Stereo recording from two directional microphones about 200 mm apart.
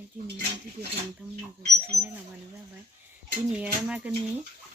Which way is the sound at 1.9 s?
15° right (ahead or behind).